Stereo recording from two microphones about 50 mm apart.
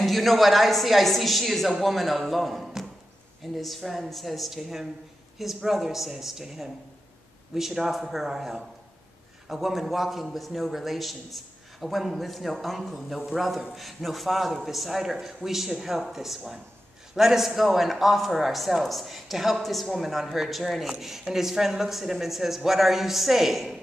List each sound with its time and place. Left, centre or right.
0.0 s a man's voice: centre